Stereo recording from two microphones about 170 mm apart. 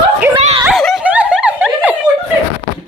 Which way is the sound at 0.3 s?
35° right (ahead or behind).